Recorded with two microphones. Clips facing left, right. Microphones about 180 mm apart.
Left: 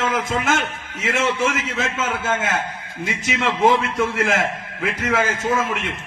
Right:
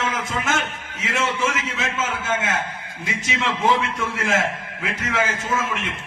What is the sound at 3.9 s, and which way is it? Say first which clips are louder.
A man's voice: left 3 dB; 55° left (ahead or behind).